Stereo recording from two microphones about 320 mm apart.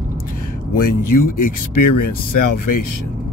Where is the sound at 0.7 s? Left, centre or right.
Left.